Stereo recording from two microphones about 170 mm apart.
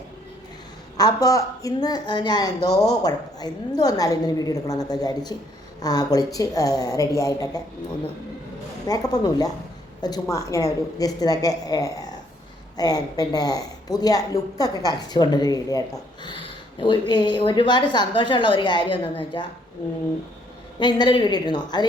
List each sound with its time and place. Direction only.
0.9 s a woman's voice: 20° left (ahead or behind)
8.9 s a woman's voice: 20° left (ahead or behind)
20.7 s a woman's voice: 25° left (ahead or behind)